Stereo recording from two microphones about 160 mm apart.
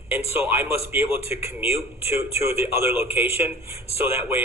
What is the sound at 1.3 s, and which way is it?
Speech, 40° left (ahead or behind).